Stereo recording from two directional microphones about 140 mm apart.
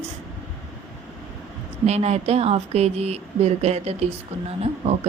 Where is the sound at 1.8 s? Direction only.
50° right (ahead or behind).